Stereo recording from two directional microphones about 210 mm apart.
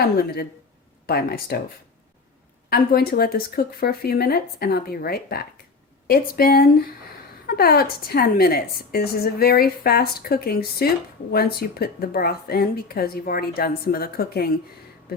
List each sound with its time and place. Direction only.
0.0 s a woman's voice: 50° left (ahead or behind)
2.6 s a woman's voice: 45° left (ahead or behind)